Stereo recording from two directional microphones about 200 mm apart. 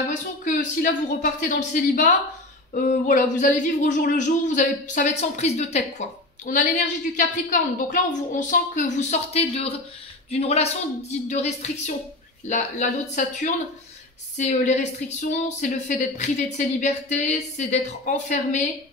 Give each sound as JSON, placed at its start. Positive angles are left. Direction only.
{"t": 0.5, "sound": "a woman's voice", "side_deg": 40}